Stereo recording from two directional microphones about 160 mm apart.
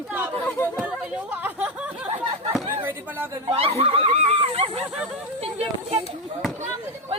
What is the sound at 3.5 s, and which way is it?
Speech, 35° right (ahead or behind).